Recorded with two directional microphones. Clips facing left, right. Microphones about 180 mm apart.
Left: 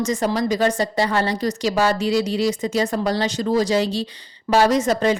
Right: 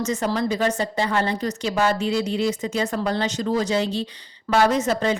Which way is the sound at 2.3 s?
35° left (ahead or behind).